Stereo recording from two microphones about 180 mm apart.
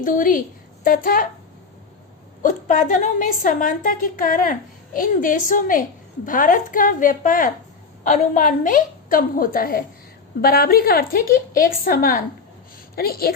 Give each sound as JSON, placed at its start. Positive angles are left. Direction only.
{"t": 0.0, "sound": "a woman's voice", "side_deg": 50}
{"t": 2.4, "sound": "a woman's voice", "side_deg": 45}